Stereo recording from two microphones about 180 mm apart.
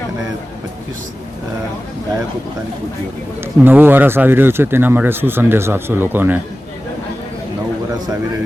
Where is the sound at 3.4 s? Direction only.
10° right (ahead or behind).